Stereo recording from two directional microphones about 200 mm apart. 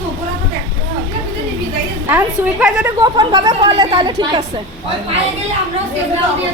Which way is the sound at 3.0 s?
20° right (ahead or behind).